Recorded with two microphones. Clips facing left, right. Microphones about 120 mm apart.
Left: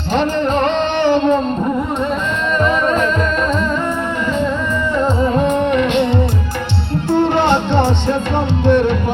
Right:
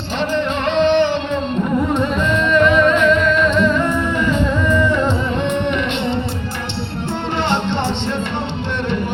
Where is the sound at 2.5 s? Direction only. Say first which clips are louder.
Right 2 dB; 35° left (ahead or behind).